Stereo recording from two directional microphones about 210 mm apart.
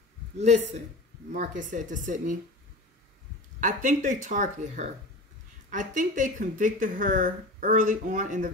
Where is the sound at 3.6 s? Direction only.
35° right (ahead or behind).